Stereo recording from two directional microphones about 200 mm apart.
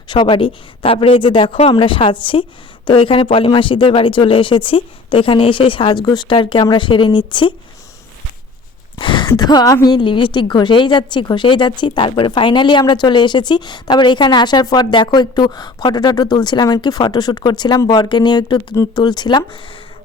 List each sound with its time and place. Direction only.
0.1 s a woman's voice: 25° left (ahead or behind)
9.0 s a woman's voice: 25° left (ahead or behind)